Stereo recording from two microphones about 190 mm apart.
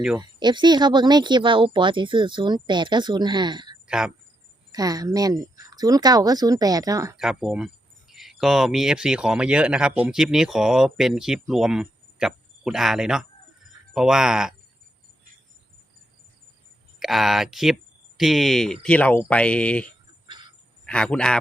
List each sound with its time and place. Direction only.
0.2 s speech: 25° right (ahead or behind)
3.8 s speech: 5° right (ahead or behind)
4.7 s speech: 20° right (ahead or behind)
7.2 s speech: centre (ahead or behind)
17.0 s speech: centre (ahead or behind)
20.2 s cricket: 25° right (ahead or behind)
20.8 s speech: 5° left (ahead or behind)